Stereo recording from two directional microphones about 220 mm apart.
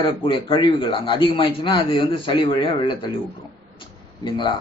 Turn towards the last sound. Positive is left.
turn(degrees=20)  # may be behind; listen again after turning